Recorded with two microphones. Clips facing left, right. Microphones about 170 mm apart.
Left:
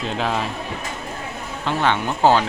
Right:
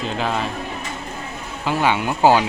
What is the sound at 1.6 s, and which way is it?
Speech, 10° right (ahead or behind).